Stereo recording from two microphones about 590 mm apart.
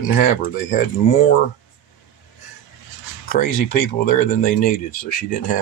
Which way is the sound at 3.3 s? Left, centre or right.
Centre.